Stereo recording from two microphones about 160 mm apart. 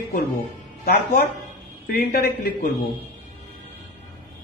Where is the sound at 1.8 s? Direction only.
75° left (ahead or behind).